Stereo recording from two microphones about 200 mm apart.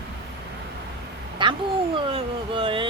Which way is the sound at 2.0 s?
25° right (ahead or behind).